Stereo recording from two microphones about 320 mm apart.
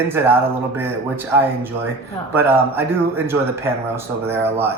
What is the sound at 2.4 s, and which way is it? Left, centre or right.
A man's voice, centre.